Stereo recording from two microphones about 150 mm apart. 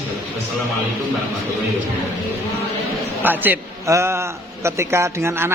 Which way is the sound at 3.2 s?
10° right (ahead or behind).